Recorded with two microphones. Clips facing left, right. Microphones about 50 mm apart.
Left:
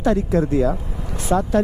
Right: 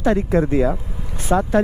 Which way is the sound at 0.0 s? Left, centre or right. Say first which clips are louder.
Right 1 dB; right.